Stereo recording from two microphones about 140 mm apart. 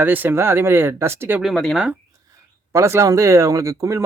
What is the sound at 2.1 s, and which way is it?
Speech, 20° right (ahead or behind).